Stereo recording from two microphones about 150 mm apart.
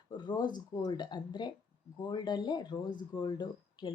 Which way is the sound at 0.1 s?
30° left (ahead or behind).